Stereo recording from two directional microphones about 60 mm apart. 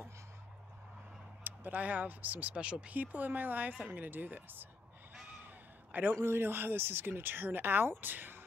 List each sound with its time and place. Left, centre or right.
1.4 s speech: right
3.0 s speech: right
5.9 s a sound: right
6.1 s speech: right